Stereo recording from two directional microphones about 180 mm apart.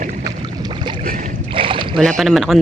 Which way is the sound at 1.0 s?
50° right (ahead or behind).